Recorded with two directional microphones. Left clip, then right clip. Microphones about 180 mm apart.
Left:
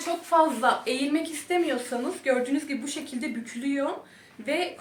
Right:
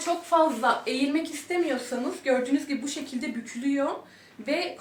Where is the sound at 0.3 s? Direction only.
20° left (ahead or behind).